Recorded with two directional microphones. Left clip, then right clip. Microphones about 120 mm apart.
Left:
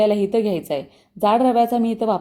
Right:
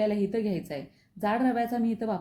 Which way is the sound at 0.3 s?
25° left (ahead or behind).